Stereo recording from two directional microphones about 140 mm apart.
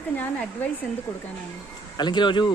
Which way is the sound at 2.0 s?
30° left (ahead or behind).